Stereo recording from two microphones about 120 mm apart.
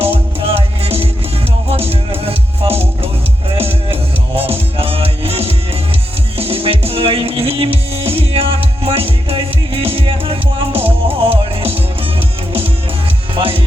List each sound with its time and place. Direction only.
0.0 s music: 50° right (ahead or behind)
4.4 s music: 55° right (ahead or behind)
13.3 s music: 50° right (ahead or behind)